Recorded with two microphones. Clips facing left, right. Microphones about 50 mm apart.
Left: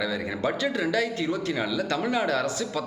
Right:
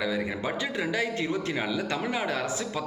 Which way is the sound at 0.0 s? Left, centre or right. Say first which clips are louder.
Left 2 dB; centre.